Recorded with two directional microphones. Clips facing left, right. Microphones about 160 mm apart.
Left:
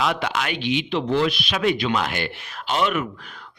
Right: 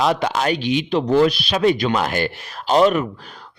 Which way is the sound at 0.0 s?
35° right (ahead or behind).